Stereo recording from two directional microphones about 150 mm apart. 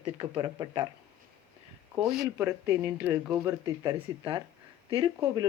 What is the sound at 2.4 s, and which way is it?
Speech, 10° right (ahead or behind).